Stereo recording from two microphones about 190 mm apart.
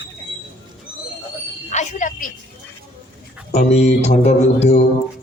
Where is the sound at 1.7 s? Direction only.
40° left (ahead or behind).